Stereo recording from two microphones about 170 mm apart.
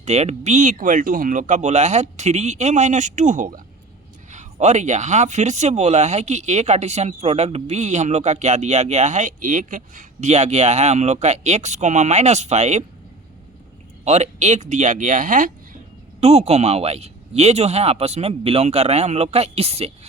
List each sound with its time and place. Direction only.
0.0 s speech: 40° right (ahead or behind)
14.0 s speech: 40° right (ahead or behind)
16.2 s speech: 40° right (ahead or behind)